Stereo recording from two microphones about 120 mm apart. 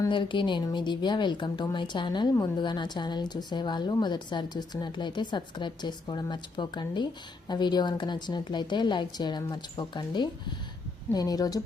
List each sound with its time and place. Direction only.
0.1 s speech: 40° left (ahead or behind)